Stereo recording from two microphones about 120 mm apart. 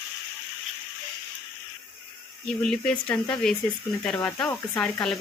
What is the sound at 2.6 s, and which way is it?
Speech, 5° left (ahead or behind).